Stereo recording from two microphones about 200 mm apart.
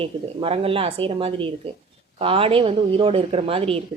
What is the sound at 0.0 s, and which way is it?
Speech, 30° right (ahead or behind).